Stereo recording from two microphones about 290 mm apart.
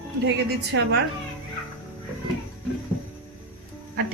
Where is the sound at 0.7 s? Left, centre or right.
Right.